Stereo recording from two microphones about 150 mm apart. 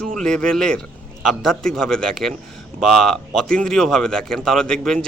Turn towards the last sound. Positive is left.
turn(degrees=5)  # may be behind; listen again after turning